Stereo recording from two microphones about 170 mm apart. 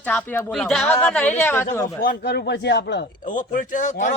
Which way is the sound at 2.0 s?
65° left (ahead or behind).